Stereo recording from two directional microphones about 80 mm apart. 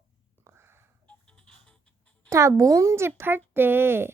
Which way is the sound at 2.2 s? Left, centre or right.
Right.